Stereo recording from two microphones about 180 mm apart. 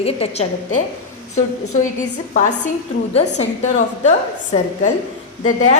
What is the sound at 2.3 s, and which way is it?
A woman's voice, 45° left (ahead or behind).